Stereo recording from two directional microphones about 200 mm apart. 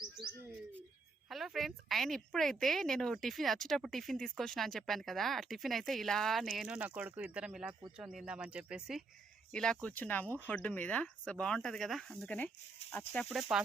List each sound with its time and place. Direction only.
1.3 s a woman's voice: centre (ahead or behind)